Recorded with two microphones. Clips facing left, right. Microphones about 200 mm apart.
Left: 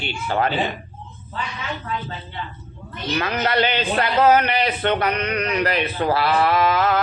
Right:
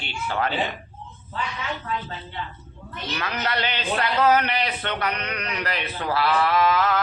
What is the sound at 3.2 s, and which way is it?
Speech, 50° left (ahead or behind).